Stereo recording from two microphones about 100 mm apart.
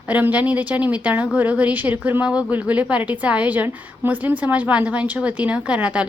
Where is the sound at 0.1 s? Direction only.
15° right (ahead or behind).